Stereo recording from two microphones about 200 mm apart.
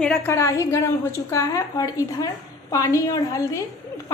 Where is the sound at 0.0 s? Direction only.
5° left (ahead or behind).